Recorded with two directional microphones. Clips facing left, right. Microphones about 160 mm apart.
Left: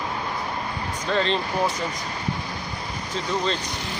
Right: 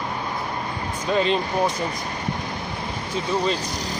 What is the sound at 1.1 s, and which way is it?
Speech, 10° right (ahead or behind).